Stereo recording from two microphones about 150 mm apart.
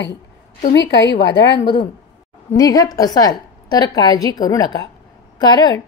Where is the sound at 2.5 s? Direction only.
25° left (ahead or behind).